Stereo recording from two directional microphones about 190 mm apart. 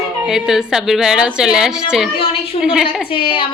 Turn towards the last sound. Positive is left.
turn(degrees=25)  # may be behind; listen again after turning